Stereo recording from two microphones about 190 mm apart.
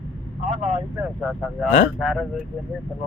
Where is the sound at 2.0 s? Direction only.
Centre (ahead or behind).